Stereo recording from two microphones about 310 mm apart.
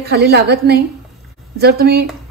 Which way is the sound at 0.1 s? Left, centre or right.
Right.